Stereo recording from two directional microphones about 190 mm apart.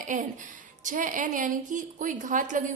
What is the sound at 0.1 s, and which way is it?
A woman's voice, 40° right (ahead or behind).